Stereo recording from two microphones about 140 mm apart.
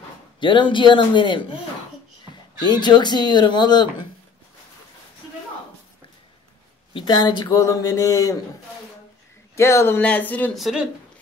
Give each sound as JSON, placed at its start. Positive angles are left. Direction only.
{"t": 0.4, "sound": "speech", "side_deg": 35}
{"t": 2.6, "sound": "speech", "side_deg": 30}
{"t": 6.9, "sound": "speech", "side_deg": 35}
{"t": 9.6, "sound": "speech", "side_deg": 20}
{"t": 10.5, "sound": "a woman's voice", "side_deg": 0}